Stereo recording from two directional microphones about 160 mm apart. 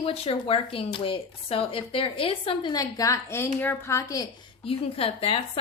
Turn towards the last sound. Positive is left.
turn(degrees=35)  # may be behind; listen again after turning